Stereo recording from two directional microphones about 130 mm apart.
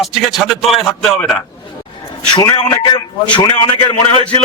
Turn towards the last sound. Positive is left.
turn(degrees=35)  # may be behind; listen again after turning